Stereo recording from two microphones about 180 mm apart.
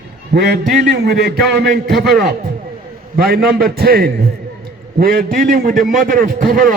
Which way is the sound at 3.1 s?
55° right (ahead or behind).